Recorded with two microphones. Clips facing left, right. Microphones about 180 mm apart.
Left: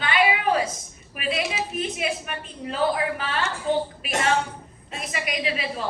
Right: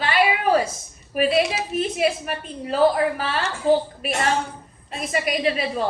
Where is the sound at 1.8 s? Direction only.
40° right (ahead or behind).